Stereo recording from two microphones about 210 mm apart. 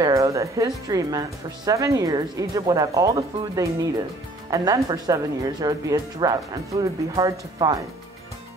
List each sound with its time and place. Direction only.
0.0 s speech: 15° right (ahead or behind)